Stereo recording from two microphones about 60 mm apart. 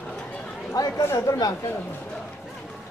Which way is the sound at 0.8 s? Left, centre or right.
Left.